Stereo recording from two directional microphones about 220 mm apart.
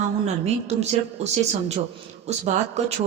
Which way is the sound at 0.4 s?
30° right (ahead or behind).